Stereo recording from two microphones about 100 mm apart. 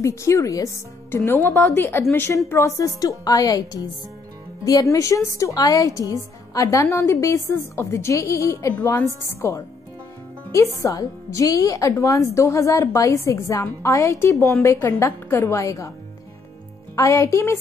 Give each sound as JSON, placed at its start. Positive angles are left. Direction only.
{"t": 0.0, "sound": "a woman's voice", "side_deg": 30}
{"t": 1.1, "sound": "a woman's voice", "side_deg": 25}
{"t": 16.9, "sound": "a woman's voice", "side_deg": 30}